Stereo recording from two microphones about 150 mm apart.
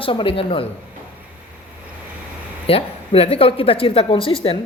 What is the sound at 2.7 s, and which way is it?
Speech, 40° left (ahead or behind).